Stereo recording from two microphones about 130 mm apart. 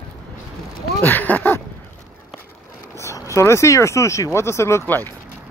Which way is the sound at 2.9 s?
25° left (ahead or behind).